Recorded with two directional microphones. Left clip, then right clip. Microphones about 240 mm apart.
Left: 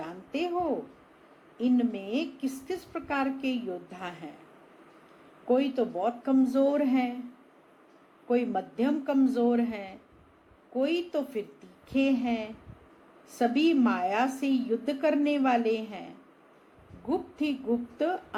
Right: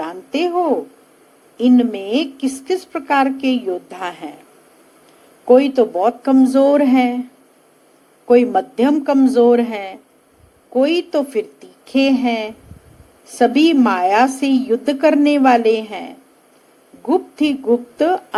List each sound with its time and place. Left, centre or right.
0.0 s speech: right
5.5 s speech: right
8.3 s speech: right